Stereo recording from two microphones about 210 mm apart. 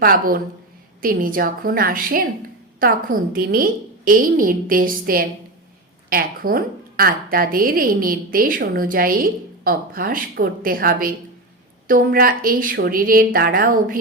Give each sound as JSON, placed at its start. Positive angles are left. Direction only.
{"t": 0.0, "sound": "a woman's voice", "side_deg": -45}